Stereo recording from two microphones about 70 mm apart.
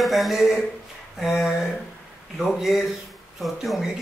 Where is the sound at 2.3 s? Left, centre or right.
Centre.